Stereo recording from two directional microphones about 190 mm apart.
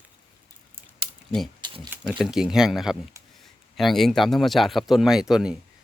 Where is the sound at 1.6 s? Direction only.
25° right (ahead or behind).